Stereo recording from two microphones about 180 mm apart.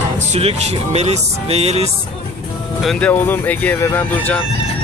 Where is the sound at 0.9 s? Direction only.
35° right (ahead or behind).